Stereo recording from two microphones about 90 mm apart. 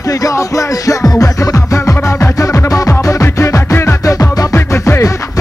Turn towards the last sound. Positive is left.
turn(degrees=30)  # may be behind; listen again after turning